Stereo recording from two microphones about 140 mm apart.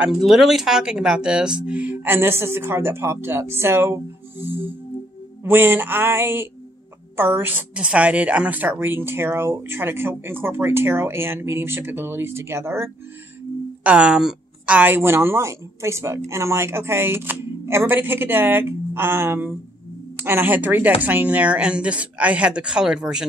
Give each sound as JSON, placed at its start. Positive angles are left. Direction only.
{"t": 0.0, "sound": "a woman's voice", "side_deg": 0}
{"t": 13.8, "sound": "a woman's voice", "side_deg": -5}